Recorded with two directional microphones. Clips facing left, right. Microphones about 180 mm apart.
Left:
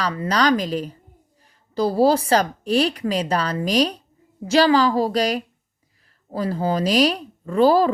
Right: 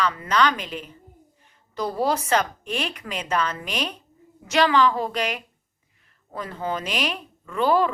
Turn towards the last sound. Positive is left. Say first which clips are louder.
# left 5 dB
turn(degrees=35)  # may be behind; listen again after turning